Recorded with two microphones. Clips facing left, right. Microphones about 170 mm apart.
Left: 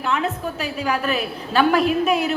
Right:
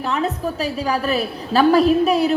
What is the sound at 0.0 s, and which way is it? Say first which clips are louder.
A woman's voice: right 2 dB; 35° right (ahead or behind).